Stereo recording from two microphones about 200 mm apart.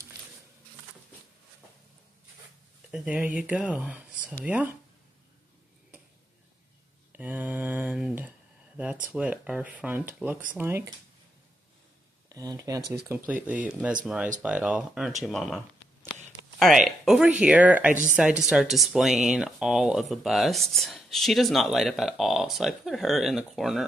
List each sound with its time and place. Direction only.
2.9 s speech: 5° right (ahead or behind)
7.1 s a sound: 10° right (ahead or behind)
9.0 s speech: 5° right (ahead or behind)
12.3 s speech: 20° right (ahead or behind)
15.2 s a sound: centre (ahead or behind)
16.5 s speech: centre (ahead or behind)